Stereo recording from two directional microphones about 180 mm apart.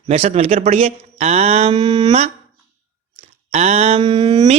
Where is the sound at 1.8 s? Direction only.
25° right (ahead or behind).